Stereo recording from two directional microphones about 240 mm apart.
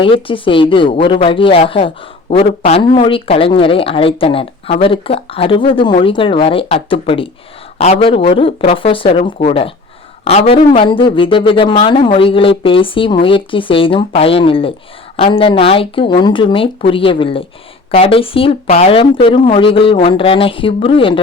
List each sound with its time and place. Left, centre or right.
0.0 s speech: left